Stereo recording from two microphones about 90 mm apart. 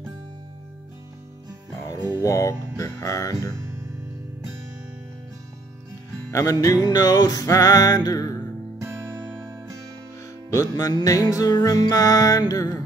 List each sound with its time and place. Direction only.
2.2 s music: 40° left (ahead or behind)
6.3 s music: 35° left (ahead or behind)
6.8 s music: 45° left (ahead or behind)
10.5 s music: 40° left (ahead or behind)